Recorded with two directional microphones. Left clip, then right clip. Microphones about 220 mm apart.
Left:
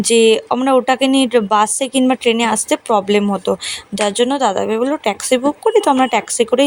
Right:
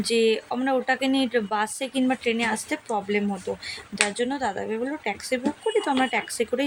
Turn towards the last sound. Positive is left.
turn(degrees=35)  # may be behind; listen again after turning